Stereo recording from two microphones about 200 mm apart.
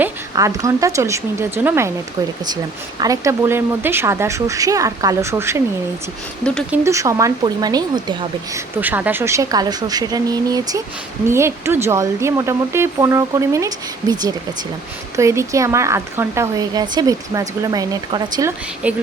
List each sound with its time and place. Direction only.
0.0 s speech: 15° right (ahead or behind)
3.0 s speech: 15° right (ahead or behind)
6.4 s speech: 5° left (ahead or behind)
6.7 s speech: 15° right (ahead or behind)
8.5 s speech: 10° right (ahead or behind)
18.8 s speech: 5° right (ahead or behind)